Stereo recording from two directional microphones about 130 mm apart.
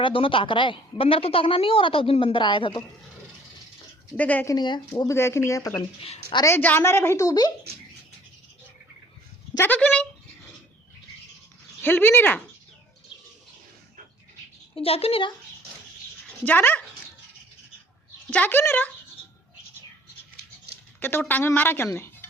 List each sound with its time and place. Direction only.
0.0 s a woman's voice: 40° left (ahead or behind)
4.2 s speech: 10° left (ahead or behind)
4.4 s speech: 35° left (ahead or behind)
5.0 s a woman's voice: 20° left (ahead or behind)
9.6 s speech: 10° left (ahead or behind)
11.8 s speech: 15° left (ahead or behind)
14.8 s a woman's voice: 50° left (ahead or behind)
16.5 s speech: 15° left (ahead or behind)
18.3 s speech: 15° left (ahead or behind)
21.0 s speech: 15° left (ahead or behind)